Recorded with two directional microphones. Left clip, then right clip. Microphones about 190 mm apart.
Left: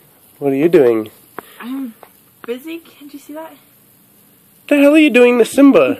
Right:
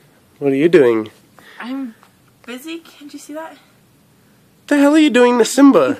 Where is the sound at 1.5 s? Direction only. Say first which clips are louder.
Right 2 dB; 25° right (ahead or behind).